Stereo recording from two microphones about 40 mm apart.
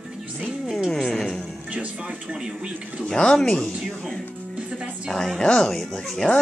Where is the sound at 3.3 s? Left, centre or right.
Centre.